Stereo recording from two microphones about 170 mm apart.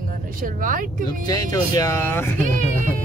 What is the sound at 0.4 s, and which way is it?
Speech, 55° right (ahead or behind).